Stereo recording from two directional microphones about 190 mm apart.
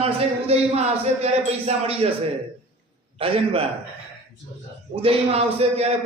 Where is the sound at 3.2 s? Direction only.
30° right (ahead or behind).